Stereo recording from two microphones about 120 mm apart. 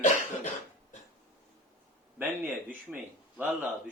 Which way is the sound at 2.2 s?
20° right (ahead or behind).